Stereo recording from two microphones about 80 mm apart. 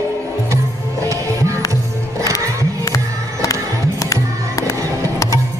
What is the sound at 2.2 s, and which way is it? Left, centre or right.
Music, left.